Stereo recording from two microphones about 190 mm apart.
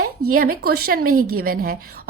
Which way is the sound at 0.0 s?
50° right (ahead or behind).